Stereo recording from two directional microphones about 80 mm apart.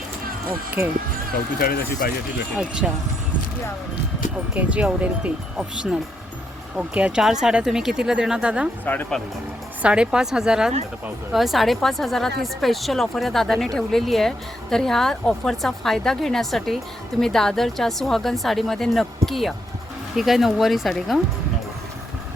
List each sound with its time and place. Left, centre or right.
0.8 s speech: right
2.6 s speech: centre
4.5 s speech: centre
8.8 s speech: left
9.8 s a woman's voice: centre